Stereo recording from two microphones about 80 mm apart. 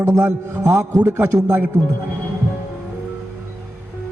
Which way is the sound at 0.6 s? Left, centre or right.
Right.